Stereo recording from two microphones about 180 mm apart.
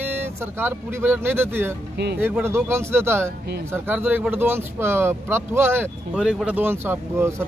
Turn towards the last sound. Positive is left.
turn(degrees=-15)  # may be behind; listen again after turning